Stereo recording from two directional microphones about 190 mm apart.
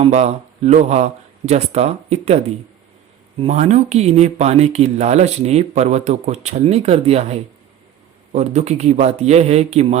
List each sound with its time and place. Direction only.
0.0 s speech: 35° right (ahead or behind)
3.4 s speech: 35° right (ahead or behind)